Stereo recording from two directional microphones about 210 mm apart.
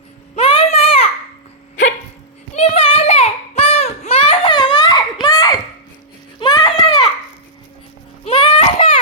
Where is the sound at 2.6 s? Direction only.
30° left (ahead or behind).